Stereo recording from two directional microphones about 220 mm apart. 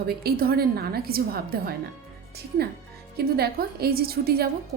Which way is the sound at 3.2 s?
45° right (ahead or behind).